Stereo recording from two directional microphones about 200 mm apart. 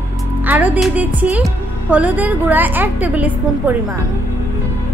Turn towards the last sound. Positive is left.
turn(degrees=-10)  # may be behind; listen again after turning